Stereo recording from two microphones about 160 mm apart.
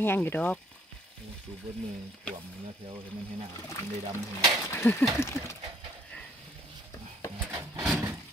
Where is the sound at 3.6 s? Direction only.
20° left (ahead or behind).